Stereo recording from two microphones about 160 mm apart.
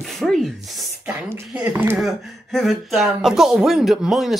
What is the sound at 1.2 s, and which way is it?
Speech, 10° right (ahead or behind).